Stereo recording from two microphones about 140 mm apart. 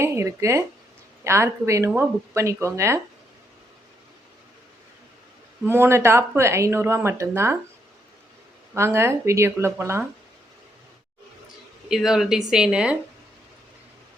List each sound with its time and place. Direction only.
0.0 s speech: 20° right (ahead or behind)
5.6 s speech: 15° right (ahead or behind)
8.7 s speech: 20° right (ahead or behind)
11.9 s speech: 5° right (ahead or behind)